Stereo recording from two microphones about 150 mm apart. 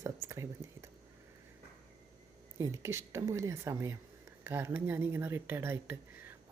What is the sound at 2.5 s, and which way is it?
Speech, 20° right (ahead or behind).